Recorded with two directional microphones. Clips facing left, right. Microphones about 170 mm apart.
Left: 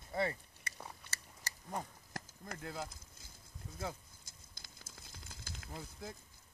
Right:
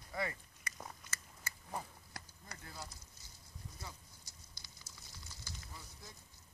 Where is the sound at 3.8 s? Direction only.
55° left (ahead or behind).